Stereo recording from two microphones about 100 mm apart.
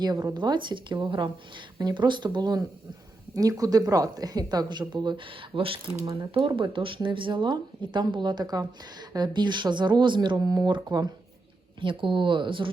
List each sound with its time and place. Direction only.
0.0 s a woman's voice: 40° right (ahead or behind)
10.3 s a woman's voice: 40° right (ahead or behind)
11.8 s speech: 55° right (ahead or behind)